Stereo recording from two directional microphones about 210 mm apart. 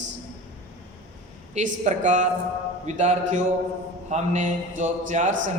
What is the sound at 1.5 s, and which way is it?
A man's voice, 35° right (ahead or behind).